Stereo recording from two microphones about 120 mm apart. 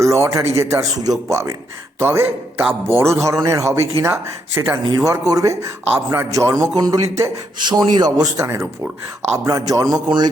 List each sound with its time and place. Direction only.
0.0 s speech: 25° right (ahead or behind)